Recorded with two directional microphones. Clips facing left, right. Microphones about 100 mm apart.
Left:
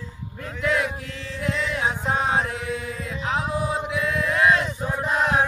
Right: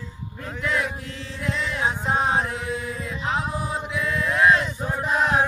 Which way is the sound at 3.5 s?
10° left (ahead or behind).